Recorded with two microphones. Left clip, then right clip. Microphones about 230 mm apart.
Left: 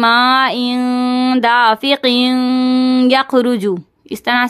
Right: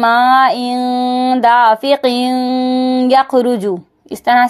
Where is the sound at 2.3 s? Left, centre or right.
Left.